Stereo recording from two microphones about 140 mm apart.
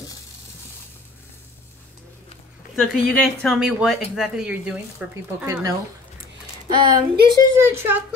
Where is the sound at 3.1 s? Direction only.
5° left (ahead or behind).